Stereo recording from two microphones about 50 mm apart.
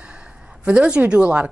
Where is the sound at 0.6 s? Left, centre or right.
Right.